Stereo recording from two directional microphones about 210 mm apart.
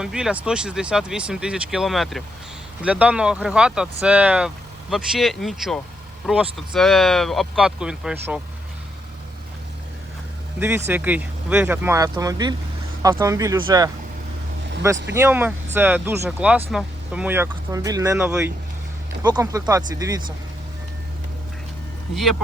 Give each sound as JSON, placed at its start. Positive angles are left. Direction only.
{"t": 0.0, "sound": "speech", "side_deg": -5}
{"t": 10.8, "sound": "speech", "side_deg": -10}
{"t": 15.1, "sound": "speech", "side_deg": -10}
{"t": 22.1, "sound": "speech", "side_deg": 0}